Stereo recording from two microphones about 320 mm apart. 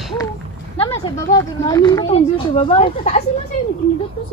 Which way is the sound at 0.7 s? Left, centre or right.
Centre.